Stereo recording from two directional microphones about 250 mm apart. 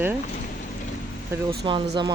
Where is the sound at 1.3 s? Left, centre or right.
Centre.